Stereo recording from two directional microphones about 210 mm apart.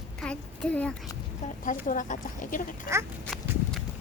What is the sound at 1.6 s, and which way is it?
Speech, 40° left (ahead or behind).